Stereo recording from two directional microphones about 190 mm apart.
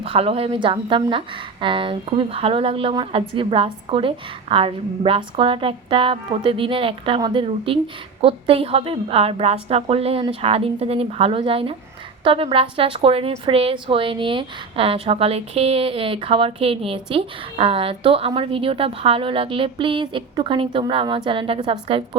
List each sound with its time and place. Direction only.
0.0 s a woman's voice: 30° right (ahead or behind)